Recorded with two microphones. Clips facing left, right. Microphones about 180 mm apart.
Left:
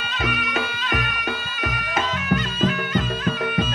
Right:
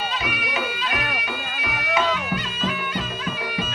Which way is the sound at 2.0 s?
50° left (ahead or behind).